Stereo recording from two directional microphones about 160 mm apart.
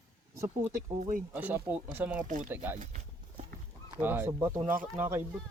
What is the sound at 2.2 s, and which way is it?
Speech, 55° right (ahead or behind).